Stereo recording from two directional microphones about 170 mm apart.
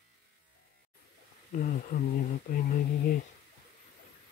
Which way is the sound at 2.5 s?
55° left (ahead or behind).